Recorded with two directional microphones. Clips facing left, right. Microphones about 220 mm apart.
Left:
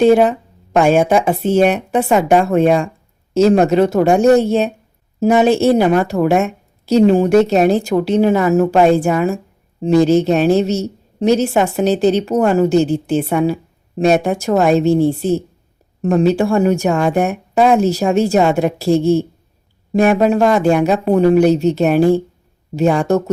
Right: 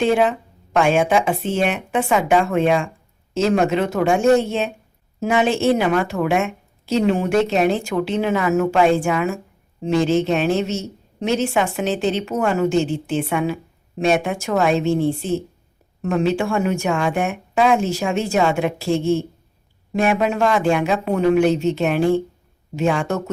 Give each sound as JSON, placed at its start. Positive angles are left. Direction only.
{"t": 0.0, "sound": "a woman's voice", "side_deg": 40}